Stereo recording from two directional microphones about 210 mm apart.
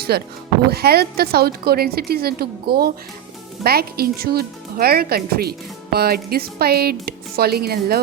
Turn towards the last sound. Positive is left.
turn(degrees=-45)  # may be behind; listen again after turning